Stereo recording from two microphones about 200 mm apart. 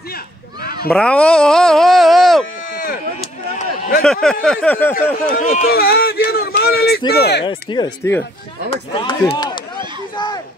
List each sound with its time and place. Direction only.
0.8 s speech: 5° left (ahead or behind)
4.0 s speech: 5° left (ahead or behind)
5.2 s speech: 40° left (ahead or behind)
5.7 s speech: 50° left (ahead or behind)
6.6 s a sound: 50° left (ahead or behind)
7.2 s speech: 55° left (ahead or behind)
7.4 s speech: 20° left (ahead or behind)
10.1 s a sound: 20° left (ahead or behind)